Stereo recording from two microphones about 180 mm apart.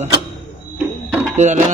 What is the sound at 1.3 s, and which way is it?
Speech, 40° right (ahead or behind).